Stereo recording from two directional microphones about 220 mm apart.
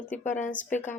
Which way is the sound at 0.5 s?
10° left (ahead or behind).